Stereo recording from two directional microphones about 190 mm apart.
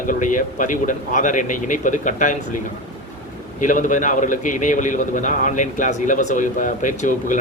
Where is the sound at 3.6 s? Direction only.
40° left (ahead or behind).